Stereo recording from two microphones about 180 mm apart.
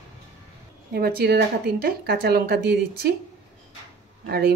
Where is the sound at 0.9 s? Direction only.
55° right (ahead or behind).